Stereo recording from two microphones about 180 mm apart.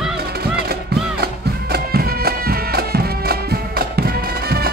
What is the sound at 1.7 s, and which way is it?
Music, 60° right (ahead or behind).